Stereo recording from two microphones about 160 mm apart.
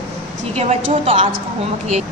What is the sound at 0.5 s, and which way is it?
Speech, 40° right (ahead or behind).